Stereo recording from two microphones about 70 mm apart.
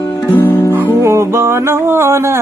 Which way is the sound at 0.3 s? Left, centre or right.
Left.